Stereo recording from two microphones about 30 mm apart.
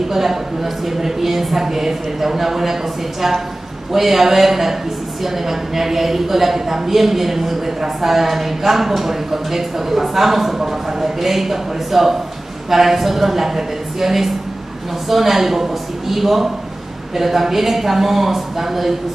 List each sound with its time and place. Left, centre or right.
0.1 s speech: centre